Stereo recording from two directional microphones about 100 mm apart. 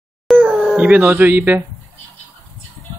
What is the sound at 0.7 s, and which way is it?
Speech, 15° right (ahead or behind).